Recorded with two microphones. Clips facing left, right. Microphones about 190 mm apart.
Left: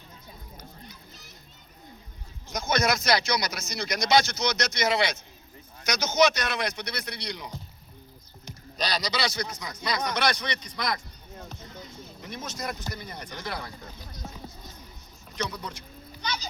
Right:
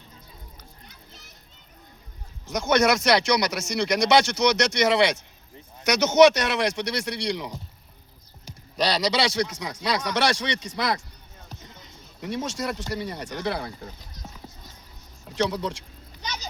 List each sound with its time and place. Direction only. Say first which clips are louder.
2.5 s speech: right 6 dB; 70° right (ahead or behind)
8.7 s speech: right 7 dB; 75° right (ahead or behind)
12.2 s speech: right 7 dB; 75° right (ahead or behind)
15.4 s speech: right 8 dB; 75° right (ahead or behind)